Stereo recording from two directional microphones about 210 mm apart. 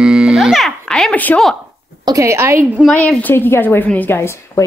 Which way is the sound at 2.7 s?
5° left (ahead or behind).